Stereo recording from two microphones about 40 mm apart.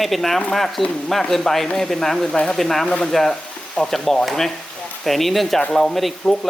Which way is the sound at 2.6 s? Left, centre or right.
Centre.